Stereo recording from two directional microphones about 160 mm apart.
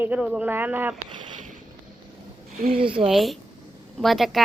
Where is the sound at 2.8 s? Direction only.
35° right (ahead or behind).